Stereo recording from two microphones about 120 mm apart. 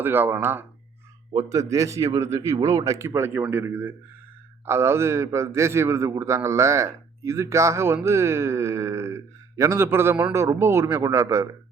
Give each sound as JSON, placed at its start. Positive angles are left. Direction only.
{"t": 0.0, "sound": "a man's voice", "side_deg": -15}